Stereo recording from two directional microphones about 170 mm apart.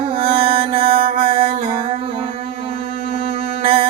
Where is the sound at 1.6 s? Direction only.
35° right (ahead or behind).